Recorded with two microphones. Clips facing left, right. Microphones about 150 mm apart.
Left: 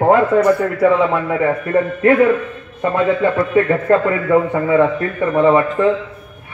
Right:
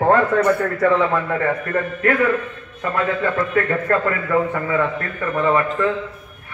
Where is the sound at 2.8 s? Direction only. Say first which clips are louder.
Left 6 dB; 25° left (ahead or behind).